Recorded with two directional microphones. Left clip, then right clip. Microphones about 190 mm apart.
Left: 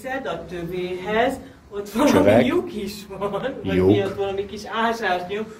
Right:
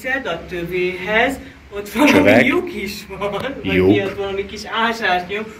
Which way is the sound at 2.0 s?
5° left (ahead or behind).